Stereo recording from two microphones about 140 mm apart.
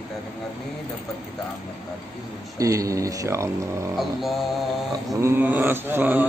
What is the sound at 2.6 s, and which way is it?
Speech, 25° right (ahead or behind).